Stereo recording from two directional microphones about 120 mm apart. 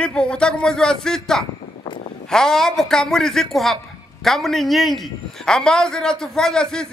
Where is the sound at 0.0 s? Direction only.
10° left (ahead or behind).